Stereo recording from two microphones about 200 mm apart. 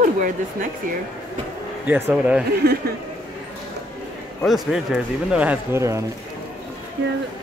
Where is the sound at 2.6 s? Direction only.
55° right (ahead or behind).